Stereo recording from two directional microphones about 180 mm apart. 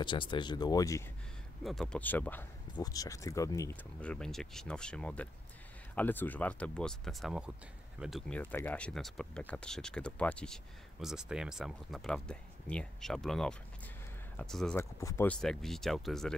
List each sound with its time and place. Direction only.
0.0 s speech: 25° left (ahead or behind)
1.6 s speech: centre (ahead or behind)
2.7 s speech: 20° left (ahead or behind)
4.0 s speech: 5° left (ahead or behind)
14.8 s speech: 15° left (ahead or behind)
15.4 s speech: centre (ahead or behind)